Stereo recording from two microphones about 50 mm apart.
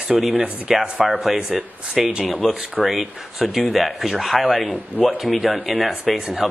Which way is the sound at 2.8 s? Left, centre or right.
Centre.